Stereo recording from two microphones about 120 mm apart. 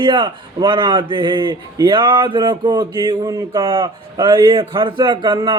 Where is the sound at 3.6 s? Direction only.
40° right (ahead or behind).